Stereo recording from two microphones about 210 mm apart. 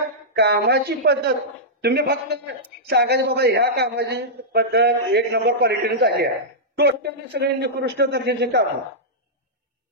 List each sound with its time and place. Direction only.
0.3 s a man's voice: 50° right (ahead or behind)